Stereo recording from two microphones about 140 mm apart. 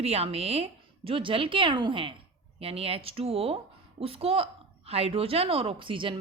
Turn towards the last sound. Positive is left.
turn(degrees=-40)  # may be behind; listen again after turning